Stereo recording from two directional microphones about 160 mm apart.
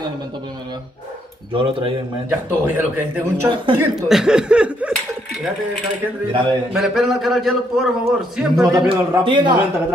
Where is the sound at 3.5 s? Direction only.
30° right (ahead or behind).